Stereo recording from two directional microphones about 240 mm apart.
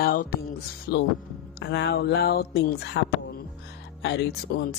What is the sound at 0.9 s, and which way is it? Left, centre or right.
Speech, left.